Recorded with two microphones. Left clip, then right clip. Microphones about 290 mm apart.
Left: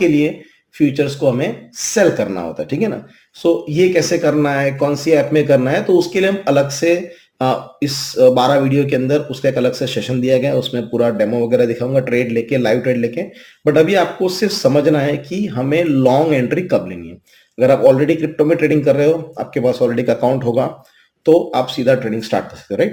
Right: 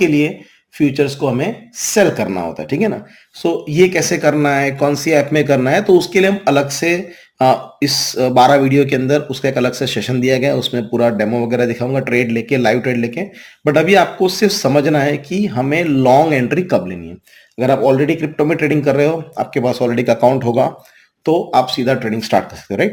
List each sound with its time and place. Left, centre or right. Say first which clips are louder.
0.9 s speech: even; right